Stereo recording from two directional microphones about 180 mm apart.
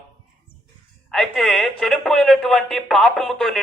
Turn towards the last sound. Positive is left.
turn(degrees=5)  # may be behind; listen again after turning